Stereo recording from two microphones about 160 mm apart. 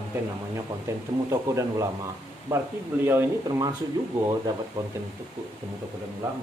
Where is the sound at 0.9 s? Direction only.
15° right (ahead or behind).